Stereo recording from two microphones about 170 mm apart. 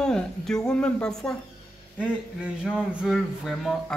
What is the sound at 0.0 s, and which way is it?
A man's voice, 5° left (ahead or behind).